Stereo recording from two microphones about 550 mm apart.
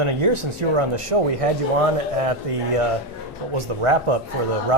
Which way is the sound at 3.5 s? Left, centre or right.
Right.